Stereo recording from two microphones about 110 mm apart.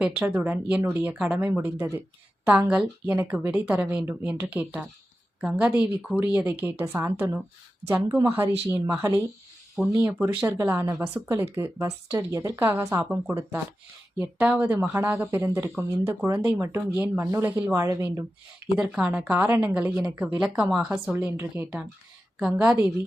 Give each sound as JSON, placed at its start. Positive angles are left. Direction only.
{"t": 0.0, "sound": "a woman's voice", "side_deg": -15}
{"t": 12.8, "sound": "speech", "side_deg": -30}
{"t": 13.1, "sound": "speech", "side_deg": -20}
{"t": 18.7, "sound": "a woman's voice", "side_deg": -10}
{"t": 20.4, "sound": "a woman's voice", "side_deg": -10}